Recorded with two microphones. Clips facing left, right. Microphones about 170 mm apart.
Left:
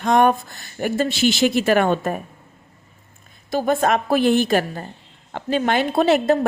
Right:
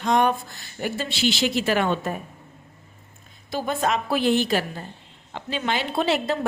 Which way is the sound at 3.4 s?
50° left (ahead or behind).